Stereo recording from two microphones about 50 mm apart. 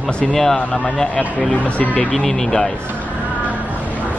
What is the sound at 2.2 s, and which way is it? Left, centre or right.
Speech, centre.